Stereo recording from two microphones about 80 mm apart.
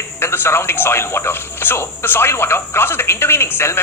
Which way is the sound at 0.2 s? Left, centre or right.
Left.